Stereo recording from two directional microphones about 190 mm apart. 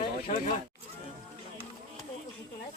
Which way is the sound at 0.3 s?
40° left (ahead or behind).